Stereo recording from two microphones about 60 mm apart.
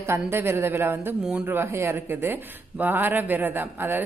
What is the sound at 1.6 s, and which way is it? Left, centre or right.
A woman's voice, right.